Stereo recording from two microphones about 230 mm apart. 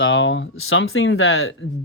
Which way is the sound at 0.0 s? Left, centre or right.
Left.